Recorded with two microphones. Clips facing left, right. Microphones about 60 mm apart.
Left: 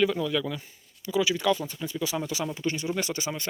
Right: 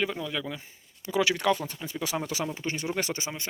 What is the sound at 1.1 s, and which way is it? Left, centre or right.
Speech, right.